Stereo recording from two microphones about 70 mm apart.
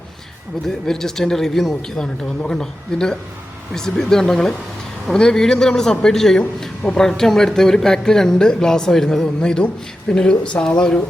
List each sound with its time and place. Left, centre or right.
0.7 s speech: centre